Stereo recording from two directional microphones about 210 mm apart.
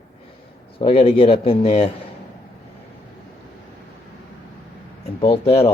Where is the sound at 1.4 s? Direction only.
30° left (ahead or behind).